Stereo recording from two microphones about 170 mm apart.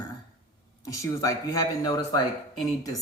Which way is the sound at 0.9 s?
20° left (ahead or behind).